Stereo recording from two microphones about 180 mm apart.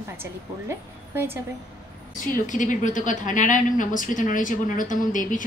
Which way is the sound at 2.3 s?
45° left (ahead or behind).